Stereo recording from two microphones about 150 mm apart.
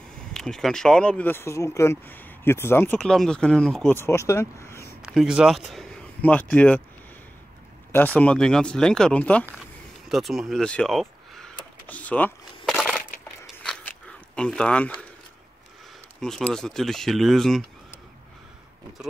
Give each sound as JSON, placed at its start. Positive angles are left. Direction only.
{"t": 0.3, "sound": "speech", "side_deg": 5}
{"t": 3.9, "sound": "speech", "side_deg": 15}
{"t": 5.0, "sound": "speech", "side_deg": -5}
{"t": 7.9, "sound": "speech", "side_deg": 10}
{"t": 10.0, "sound": "power windows", "side_deg": 0}
{"t": 13.7, "sound": "biting", "side_deg": 5}
{"t": 16.2, "sound": "speech", "side_deg": 5}